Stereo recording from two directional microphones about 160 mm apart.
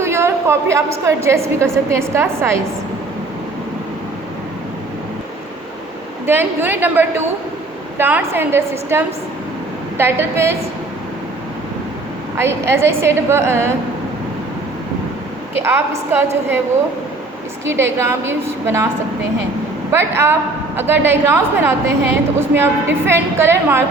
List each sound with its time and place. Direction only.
0.0 s a woman's voice: 15° right (ahead or behind)
6.2 s a woman's voice: 15° right (ahead or behind)
12.4 s a woman's voice: 15° right (ahead or behind)
15.6 s a woman's voice: 15° right (ahead or behind)
18.0 s a woman's voice: 15° right (ahead or behind)
19.9 s a woman's voice: 15° right (ahead or behind)